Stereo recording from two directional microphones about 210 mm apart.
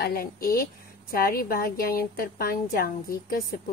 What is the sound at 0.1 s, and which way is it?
A woman's voice, 45° left (ahead or behind).